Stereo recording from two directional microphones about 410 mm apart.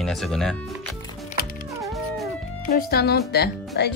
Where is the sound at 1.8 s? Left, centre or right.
Centre.